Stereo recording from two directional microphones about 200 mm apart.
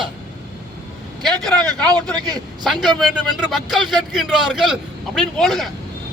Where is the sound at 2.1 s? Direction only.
20° right (ahead or behind).